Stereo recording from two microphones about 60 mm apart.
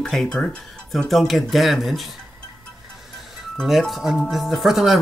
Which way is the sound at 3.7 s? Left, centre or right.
Centre.